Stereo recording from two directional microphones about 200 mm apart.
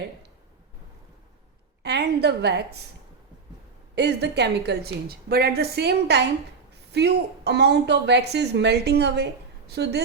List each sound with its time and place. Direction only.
1.8 s a woman's voice: 55° right (ahead or behind)
3.9 s a woman's voice: 60° right (ahead or behind)